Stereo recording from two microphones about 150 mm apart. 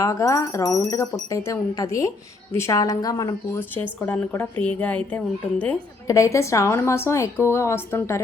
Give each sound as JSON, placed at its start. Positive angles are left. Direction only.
{"t": 0.0, "sound": "a woman's voice", "side_deg": 20}
{"t": 3.8, "sound": "a woman's voice", "side_deg": 10}
{"t": 6.1, "sound": "a woman's voice", "side_deg": 20}